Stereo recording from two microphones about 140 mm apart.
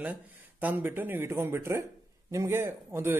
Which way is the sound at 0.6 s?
15° right (ahead or behind).